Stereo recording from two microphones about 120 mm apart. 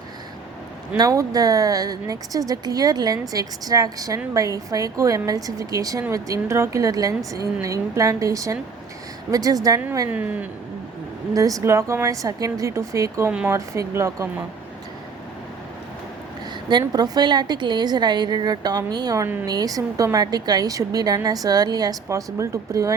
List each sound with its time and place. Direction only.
0.9 s speech: 30° right (ahead or behind)
10.1 s a woman's voice: 10° right (ahead or behind)
11.3 s speech: 30° right (ahead or behind)
16.6 s speech: 35° right (ahead or behind)